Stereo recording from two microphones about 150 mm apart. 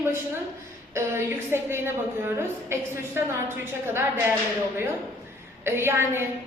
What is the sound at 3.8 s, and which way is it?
Speech, 15° right (ahead or behind).